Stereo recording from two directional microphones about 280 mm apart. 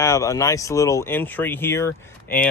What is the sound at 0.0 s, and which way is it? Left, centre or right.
Speech, centre.